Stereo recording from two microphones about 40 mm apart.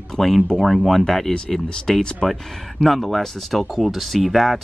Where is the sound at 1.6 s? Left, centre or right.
Left.